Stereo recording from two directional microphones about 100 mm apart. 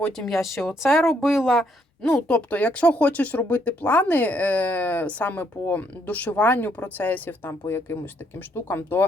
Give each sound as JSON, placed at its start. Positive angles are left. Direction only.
{"t": 0.0, "sound": "a woman's voice", "side_deg": 5}